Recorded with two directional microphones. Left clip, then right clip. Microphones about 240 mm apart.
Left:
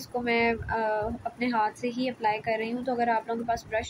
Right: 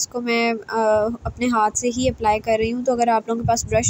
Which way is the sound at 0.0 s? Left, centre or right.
Right.